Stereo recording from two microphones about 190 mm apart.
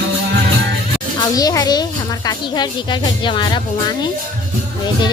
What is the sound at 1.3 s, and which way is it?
Speech, 20° left (ahead or behind).